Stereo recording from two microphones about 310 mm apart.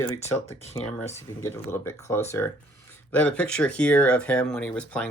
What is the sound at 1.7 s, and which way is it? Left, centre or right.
Speech, centre.